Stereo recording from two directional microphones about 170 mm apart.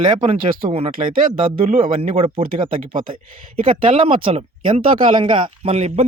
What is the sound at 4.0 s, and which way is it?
Speech, 30° right (ahead or behind).